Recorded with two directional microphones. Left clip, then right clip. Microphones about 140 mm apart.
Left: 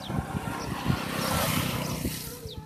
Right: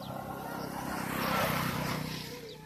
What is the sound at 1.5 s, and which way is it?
Vehicle, 15° right (ahead or behind).